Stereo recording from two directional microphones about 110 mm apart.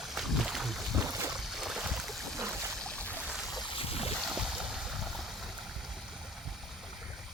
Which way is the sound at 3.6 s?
55° left (ahead or behind).